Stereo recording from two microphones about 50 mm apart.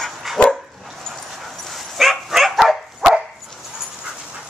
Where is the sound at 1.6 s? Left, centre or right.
Centre.